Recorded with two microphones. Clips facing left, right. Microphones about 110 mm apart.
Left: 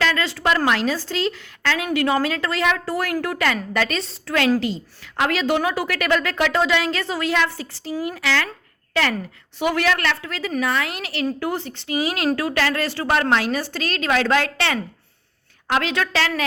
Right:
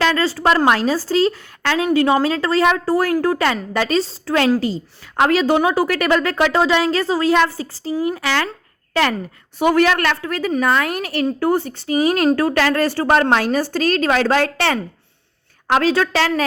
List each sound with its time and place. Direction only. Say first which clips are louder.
0.0 s a woman's voice: right 5 dB; 35° right (ahead or behind)